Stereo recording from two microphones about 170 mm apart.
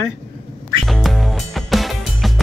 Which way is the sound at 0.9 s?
Centre (ahead or behind).